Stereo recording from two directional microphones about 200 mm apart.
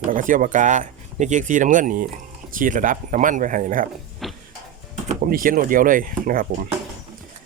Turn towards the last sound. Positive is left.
turn(degrees=-45)  # may be behind; listen again after turning